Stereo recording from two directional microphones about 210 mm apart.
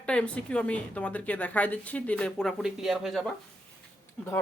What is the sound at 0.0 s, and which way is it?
A woman's voice, 5° left (ahead or behind).